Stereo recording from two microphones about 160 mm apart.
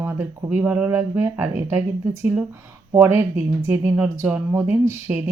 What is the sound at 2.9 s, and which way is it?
Speech, 15° right (ahead or behind).